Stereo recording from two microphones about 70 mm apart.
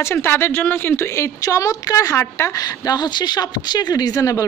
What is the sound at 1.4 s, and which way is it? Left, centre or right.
Speech, left.